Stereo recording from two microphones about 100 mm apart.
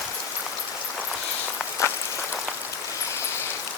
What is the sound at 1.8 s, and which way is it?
Rain on surface, 30° left (ahead or behind).